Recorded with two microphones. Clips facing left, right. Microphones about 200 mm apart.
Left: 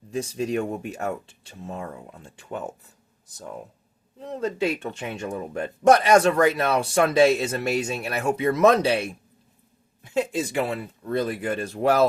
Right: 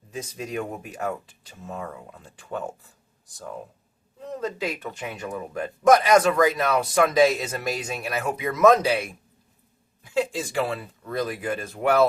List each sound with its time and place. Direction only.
0.1 s speech: 30° left (ahead or behind)
4.2 s speech: 30° left (ahead or behind)